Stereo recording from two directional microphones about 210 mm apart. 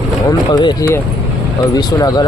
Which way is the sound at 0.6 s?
20° left (ahead or behind).